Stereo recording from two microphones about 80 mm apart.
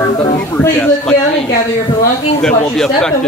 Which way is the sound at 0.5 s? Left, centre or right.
Left.